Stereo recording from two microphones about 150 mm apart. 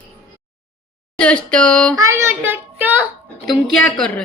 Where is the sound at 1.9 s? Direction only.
20° right (ahead or behind).